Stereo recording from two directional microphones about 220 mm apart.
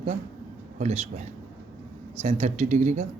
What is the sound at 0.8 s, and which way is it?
Speech, 30° right (ahead or behind).